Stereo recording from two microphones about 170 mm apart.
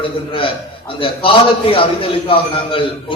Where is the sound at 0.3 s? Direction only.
30° left (ahead or behind).